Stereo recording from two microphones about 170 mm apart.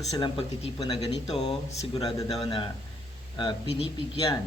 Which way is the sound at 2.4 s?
30° left (ahead or behind).